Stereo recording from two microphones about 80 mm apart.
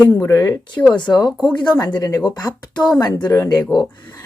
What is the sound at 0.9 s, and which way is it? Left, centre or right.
Speech, left.